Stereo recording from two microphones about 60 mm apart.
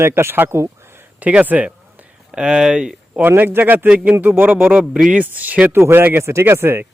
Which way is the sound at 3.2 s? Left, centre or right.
Right.